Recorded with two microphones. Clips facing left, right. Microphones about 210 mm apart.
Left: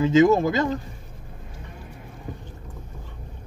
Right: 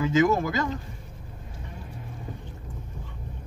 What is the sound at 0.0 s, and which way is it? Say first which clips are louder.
Speech: left 5 dB; 25° left (ahead or behind).